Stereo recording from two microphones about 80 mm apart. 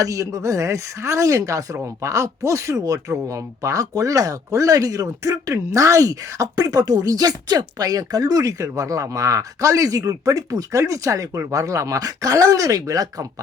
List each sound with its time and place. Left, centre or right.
0.0 s speech: right